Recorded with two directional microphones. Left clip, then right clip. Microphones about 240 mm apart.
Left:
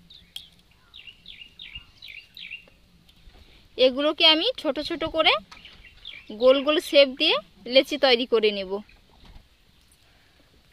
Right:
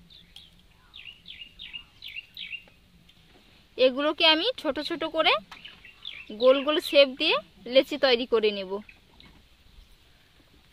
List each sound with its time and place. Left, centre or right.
0.9 s bird: right
3.7 s speech: centre